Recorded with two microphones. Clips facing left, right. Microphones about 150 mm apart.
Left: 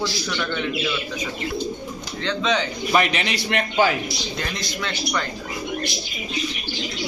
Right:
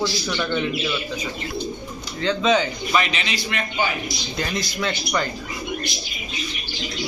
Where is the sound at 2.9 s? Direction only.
55° left (ahead or behind).